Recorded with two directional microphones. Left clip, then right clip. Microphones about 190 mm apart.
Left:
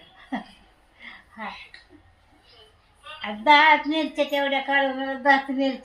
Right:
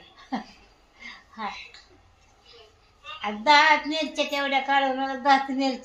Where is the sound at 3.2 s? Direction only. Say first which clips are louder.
Left 2 dB; 20° right (ahead or behind).